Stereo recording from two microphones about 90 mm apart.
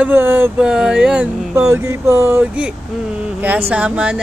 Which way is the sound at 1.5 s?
35° right (ahead or behind).